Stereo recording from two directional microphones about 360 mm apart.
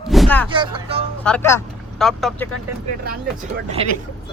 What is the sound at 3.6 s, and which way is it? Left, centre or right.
Speech, centre.